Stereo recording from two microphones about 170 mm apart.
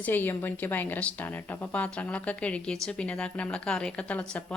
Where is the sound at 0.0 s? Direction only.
10° left (ahead or behind).